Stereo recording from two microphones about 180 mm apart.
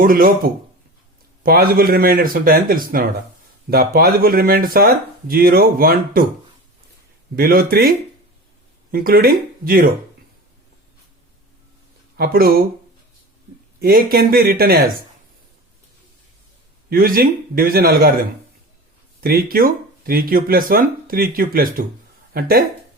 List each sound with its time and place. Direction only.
0.0 s speech: 55° right (ahead or behind)
7.3 s speech: 60° right (ahead or behind)
12.1 s speech: 55° right (ahead or behind)
13.7 s speech: 55° right (ahead or behind)
16.9 s speech: 55° right (ahead or behind)
19.2 s speech: 55° right (ahead or behind)